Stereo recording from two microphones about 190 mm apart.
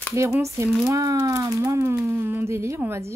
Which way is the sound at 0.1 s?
15° right (ahead or behind).